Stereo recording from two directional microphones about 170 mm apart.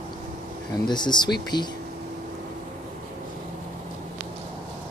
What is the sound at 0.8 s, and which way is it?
Speech, 25° left (ahead or behind).